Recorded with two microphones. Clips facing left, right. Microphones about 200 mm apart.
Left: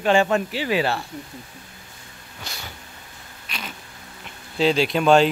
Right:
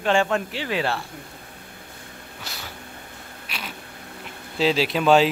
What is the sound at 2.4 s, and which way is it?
Cat, 5° right (ahead or behind).